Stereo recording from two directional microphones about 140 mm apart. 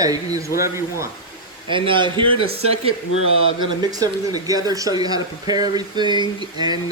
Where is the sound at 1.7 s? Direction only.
35° right (ahead or behind).